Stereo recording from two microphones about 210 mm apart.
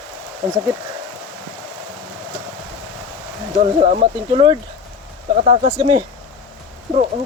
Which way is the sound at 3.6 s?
35° right (ahead or behind).